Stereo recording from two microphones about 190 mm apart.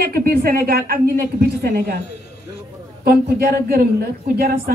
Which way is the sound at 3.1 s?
55° right (ahead or behind).